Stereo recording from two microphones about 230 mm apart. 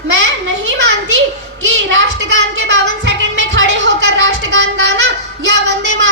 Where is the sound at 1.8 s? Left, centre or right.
Right.